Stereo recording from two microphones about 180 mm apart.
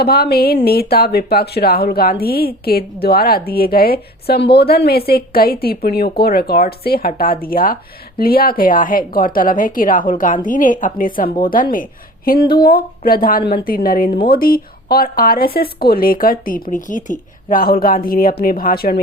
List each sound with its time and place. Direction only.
0.0 s a woman's voice: 60° left (ahead or behind)